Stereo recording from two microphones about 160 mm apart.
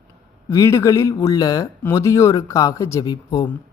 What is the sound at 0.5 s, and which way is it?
A man's voice, 20° left (ahead or behind).